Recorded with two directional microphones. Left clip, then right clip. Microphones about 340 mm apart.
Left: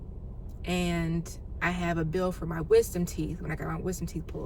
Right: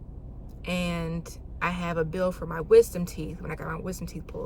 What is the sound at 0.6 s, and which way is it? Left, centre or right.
A woman's voice, centre.